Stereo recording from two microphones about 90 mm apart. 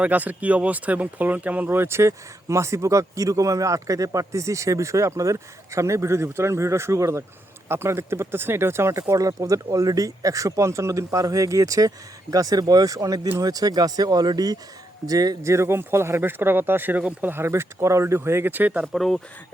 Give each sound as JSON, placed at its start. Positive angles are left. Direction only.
{"t": 0.0, "sound": "speech", "side_deg": -20}
{"t": 15.5, "sound": "speech", "side_deg": -25}
{"t": 18.9, "sound": "speech", "side_deg": 5}